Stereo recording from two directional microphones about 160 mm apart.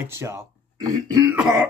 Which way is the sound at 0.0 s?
15° right (ahead or behind).